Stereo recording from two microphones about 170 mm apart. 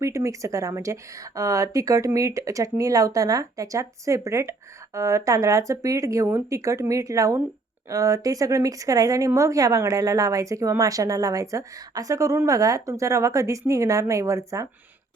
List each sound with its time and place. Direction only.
0.0 s speech: 15° right (ahead or behind)